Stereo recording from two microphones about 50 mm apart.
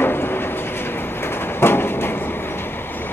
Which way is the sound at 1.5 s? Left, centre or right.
Left.